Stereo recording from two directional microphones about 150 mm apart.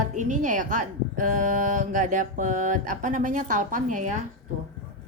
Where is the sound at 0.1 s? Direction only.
55° right (ahead or behind).